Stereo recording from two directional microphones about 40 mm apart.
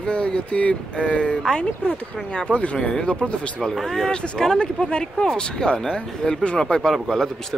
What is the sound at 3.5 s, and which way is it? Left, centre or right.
Speech, centre.